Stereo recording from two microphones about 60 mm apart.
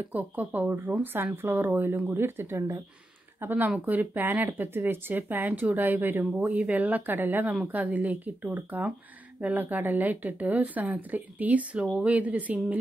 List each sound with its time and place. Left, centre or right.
0.1 s speech: right
11.8 s speech: centre
12.1 s speech: right